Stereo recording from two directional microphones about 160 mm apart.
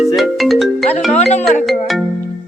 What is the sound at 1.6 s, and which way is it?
Music, centre (ahead or behind).